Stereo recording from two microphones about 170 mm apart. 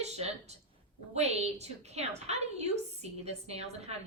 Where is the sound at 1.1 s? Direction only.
40° right (ahead or behind).